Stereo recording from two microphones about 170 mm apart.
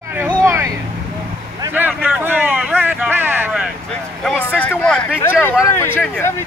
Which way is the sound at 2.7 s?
10° right (ahead or behind).